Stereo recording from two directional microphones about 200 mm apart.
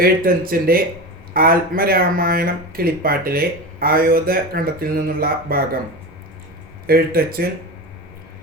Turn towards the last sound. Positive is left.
turn(degrees=-50)  # may be behind; listen again after turning